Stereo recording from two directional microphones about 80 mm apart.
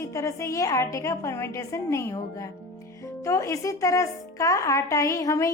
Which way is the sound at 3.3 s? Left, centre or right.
Left.